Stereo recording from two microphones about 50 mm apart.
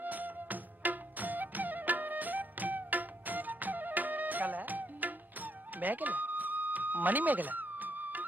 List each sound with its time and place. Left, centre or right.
0.0 s music: right